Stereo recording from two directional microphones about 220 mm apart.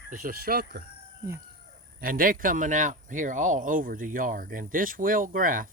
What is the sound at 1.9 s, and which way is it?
Speech, 40° right (ahead or behind).